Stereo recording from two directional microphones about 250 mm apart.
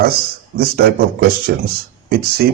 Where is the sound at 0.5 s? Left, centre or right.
Right.